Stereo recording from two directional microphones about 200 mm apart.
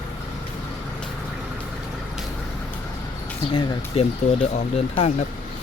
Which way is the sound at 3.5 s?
25° left (ahead or behind).